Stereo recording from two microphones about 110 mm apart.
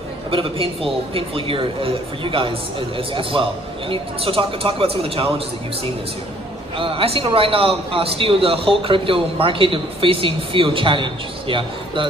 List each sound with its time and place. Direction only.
0.3 s a man's voice: 55° right (ahead or behind)
6.8 s a man's voice: 55° right (ahead or behind)